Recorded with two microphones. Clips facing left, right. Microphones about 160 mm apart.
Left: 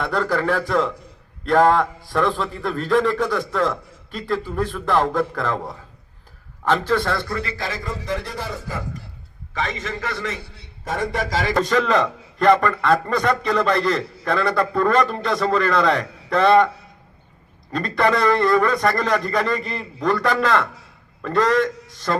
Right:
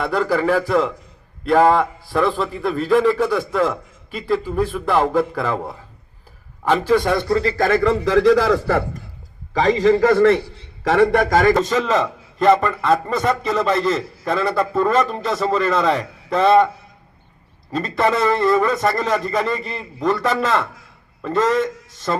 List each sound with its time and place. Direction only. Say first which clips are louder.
0.0 s a man's voice: right 3 dB; 5° right (ahead or behind); by 7.5 s 25° right (ahead or behind)
7.5 s a man's voice: right 12 dB; 50° right (ahead or behind)
7.8 s a man's voice: right 12 dB; 80° right
9.5 s a man's voice: right 13 dB; 35° right (ahead or behind)
10.8 s a man's voice: right 9 dB; 70° right (ahead or behind); by 11.5 s 50° right (ahead or behind)
11.5 s a man's voice: even; centre (ahead or behind)
17.7 s a man's voice: right 1 dB; 5° right (ahead or behind)